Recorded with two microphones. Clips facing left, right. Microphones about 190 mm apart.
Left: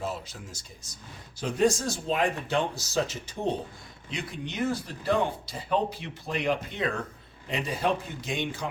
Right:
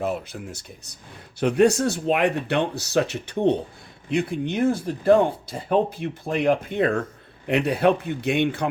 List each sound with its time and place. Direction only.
0.0 s speech: 60° right (ahead or behind)